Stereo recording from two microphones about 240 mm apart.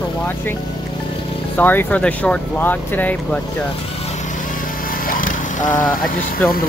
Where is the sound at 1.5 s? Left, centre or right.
Centre.